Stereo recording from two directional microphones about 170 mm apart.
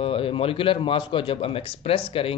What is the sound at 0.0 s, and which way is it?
A man's voice, 35° left (ahead or behind).